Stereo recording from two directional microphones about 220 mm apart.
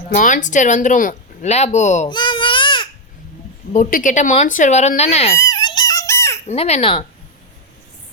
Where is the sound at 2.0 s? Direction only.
20° left (ahead or behind).